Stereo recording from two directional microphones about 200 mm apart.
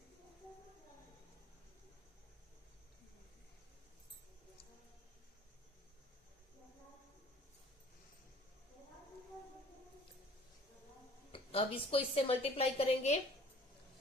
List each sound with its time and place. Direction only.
11.3 s a woman's voice: 30° left (ahead or behind)